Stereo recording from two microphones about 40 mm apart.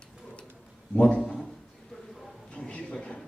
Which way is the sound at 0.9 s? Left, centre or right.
Left.